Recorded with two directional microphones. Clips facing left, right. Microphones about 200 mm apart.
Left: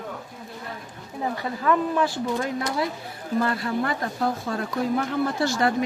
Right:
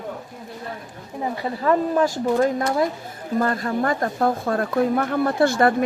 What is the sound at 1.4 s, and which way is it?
A woman's voice, 35° right (ahead or behind).